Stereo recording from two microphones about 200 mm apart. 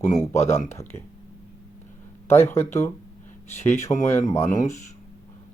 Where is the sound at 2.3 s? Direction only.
10° left (ahead or behind).